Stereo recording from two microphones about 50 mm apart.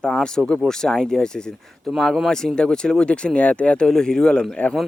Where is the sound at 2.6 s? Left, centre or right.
Centre.